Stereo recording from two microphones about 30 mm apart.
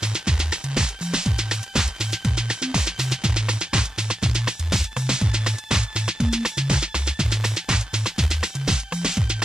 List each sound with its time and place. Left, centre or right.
0.0 s music: right